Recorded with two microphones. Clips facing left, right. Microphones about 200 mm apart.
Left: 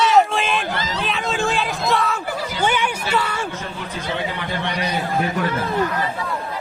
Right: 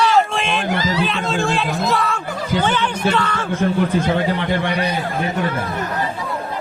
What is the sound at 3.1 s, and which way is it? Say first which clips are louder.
Speech: right 1 dB; 10° left (ahead or behind).